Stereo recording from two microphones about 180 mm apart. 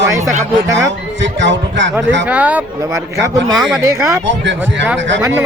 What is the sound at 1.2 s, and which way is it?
A man's voice, 80° right.